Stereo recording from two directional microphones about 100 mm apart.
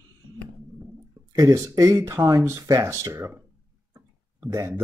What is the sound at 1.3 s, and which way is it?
Speech, 30° right (ahead or behind).